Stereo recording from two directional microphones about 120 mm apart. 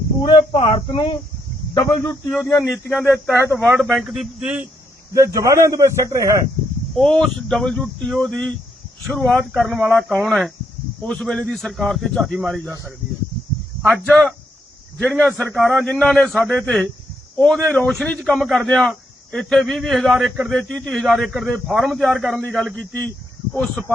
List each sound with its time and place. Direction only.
0.5 s speech: 50° left (ahead or behind)
1.7 s speech: 30° left (ahead or behind)
2.6 s a man's voice: centre (ahead or behind)
3.3 s a man's voice: 20° right (ahead or behind)
3.8 s a man's voice: centre (ahead or behind)
5.1 s a man's voice: 30° right (ahead or behind)
6.9 s a man's voice: 5° left (ahead or behind)
13.8 s a man's voice: 5° left (ahead or behind)